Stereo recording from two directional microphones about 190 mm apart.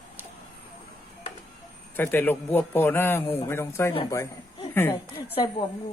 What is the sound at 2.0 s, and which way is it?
A woman's voice, 10° left (ahead or behind).